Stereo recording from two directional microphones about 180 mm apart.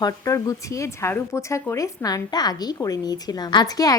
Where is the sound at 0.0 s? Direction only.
20° left (ahead or behind).